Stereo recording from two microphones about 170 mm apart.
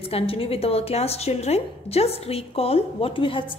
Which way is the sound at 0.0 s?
35° left (ahead or behind).